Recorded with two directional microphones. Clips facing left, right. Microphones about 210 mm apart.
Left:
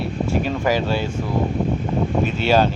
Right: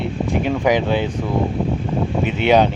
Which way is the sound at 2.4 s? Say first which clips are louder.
Right 3 dB; 20° right (ahead or behind).